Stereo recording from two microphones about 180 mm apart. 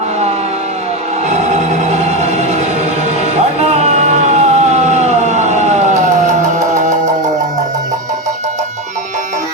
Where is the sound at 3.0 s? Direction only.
35° right (ahead or behind).